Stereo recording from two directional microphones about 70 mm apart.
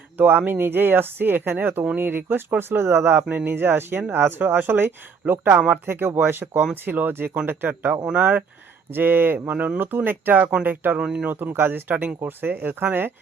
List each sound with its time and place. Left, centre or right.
0.2 s speech: right
5.5 s speech: right
5.8 s speech: right
10.9 s speech: centre
11.3 s speech: right